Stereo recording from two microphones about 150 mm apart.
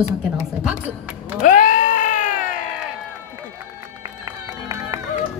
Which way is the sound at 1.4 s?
60° left (ahead or behind).